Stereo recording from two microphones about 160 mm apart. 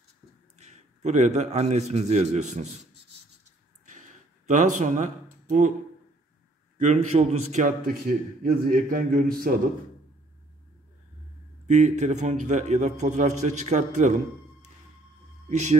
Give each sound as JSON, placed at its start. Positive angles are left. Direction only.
{"t": 0.6, "sound": "a man's voice", "side_deg": -45}
{"t": 4.5, "sound": "speech", "side_deg": -50}
{"t": 6.8, "sound": "a man's voice", "side_deg": -45}
{"t": 8.4, "sound": "a man's voice", "side_deg": -60}
{"t": 11.6, "sound": "a man's voice", "side_deg": -50}
{"t": 15.5, "sound": "a man's voice", "side_deg": -45}